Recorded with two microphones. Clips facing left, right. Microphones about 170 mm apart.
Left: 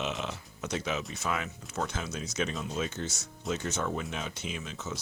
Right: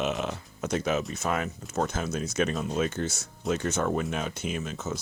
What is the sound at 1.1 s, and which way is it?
Speech, 45° right (ahead or behind).